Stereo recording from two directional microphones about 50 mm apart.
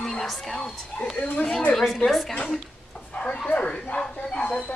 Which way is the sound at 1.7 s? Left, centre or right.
Centre.